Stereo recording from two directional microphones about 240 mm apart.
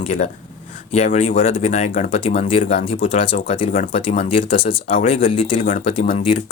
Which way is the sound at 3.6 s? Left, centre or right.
Left.